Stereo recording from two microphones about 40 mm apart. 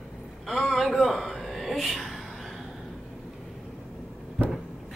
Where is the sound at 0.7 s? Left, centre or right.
Centre.